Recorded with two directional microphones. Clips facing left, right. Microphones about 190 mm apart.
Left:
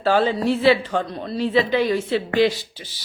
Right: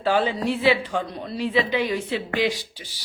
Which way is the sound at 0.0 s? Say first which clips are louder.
Left 3 dB; 15° right (ahead or behind).